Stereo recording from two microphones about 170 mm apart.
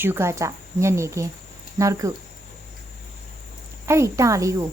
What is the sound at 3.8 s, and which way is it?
Speech, 15° right (ahead or behind).